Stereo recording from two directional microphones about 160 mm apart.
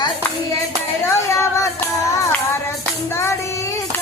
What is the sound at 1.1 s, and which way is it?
Child singing, 20° left (ahead or behind).